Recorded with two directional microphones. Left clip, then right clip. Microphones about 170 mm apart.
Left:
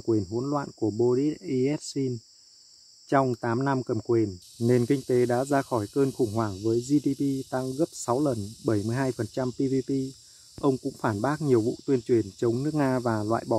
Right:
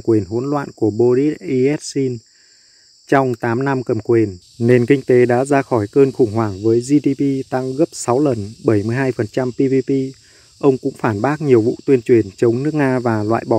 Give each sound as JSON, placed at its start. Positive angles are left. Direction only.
{"t": 0.0, "sound": "speech", "side_deg": -20}